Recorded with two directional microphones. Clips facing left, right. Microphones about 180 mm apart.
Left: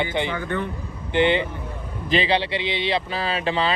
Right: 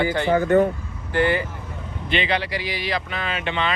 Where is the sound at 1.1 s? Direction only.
25° left (ahead or behind).